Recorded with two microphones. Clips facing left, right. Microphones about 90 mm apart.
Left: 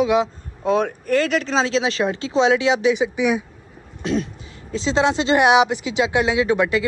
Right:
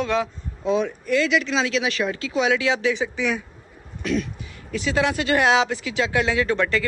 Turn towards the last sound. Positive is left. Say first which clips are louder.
# left 3 dB
turn(degrees=15)  # may be behind; listen again after turning